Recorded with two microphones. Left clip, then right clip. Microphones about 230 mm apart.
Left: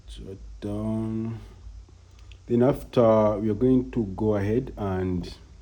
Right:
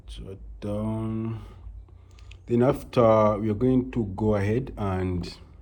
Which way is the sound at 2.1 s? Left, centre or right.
Right.